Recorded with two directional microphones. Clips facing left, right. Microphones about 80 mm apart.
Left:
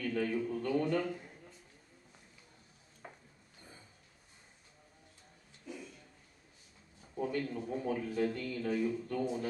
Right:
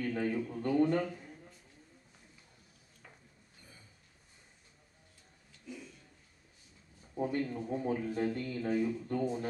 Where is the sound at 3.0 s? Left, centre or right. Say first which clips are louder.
Left 7 dB; left.